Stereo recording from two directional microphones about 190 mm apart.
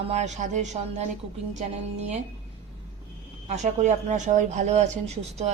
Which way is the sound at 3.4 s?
35° right (ahead or behind).